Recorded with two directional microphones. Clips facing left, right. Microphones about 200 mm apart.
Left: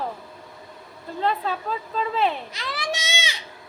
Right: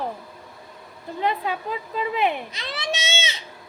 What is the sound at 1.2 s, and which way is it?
A woman's voice, 15° right (ahead or behind).